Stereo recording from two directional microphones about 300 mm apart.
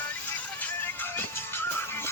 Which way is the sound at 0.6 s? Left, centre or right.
Centre.